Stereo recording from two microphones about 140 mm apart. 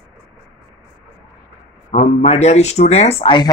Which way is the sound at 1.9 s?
55° left (ahead or behind).